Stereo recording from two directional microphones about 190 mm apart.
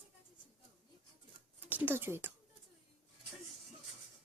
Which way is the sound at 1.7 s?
10° right (ahead or behind).